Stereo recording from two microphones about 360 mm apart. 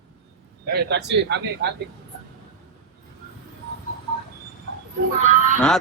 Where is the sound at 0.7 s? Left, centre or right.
Right.